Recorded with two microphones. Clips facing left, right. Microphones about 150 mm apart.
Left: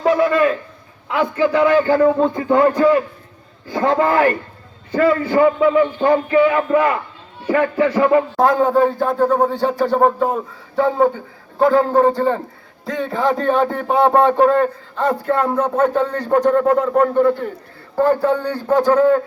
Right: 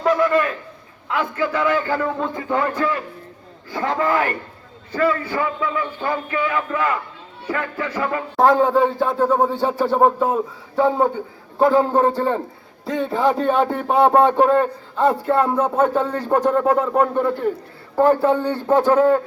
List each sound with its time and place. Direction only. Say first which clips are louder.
1.5 s a sound: left 8 dB; 20° left (ahead or behind)
2.1 s a man's voice: left 7 dB; 30° left (ahead or behind)
8.4 s speech: right 4 dB; centre (ahead or behind)